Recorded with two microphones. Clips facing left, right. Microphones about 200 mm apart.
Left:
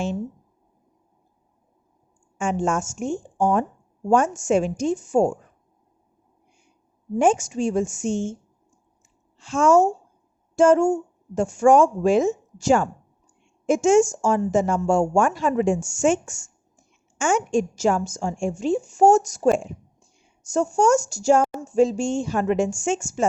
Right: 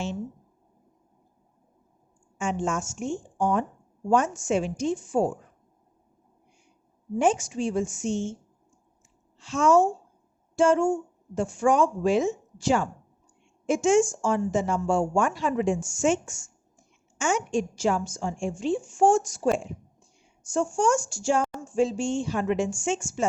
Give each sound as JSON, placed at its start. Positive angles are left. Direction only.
{"t": 2.4, "sound": "a woman's voice", "side_deg": 50}
{"t": 7.2, "sound": "a woman's voice", "side_deg": 50}
{"t": 9.4, "sound": "a woman's voice", "side_deg": 50}